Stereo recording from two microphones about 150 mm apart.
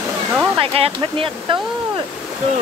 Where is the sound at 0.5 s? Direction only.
40° right (ahead or behind).